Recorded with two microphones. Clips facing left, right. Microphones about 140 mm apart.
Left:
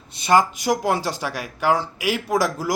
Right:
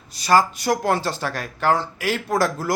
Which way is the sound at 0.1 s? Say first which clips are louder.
Even; 20° left (ahead or behind).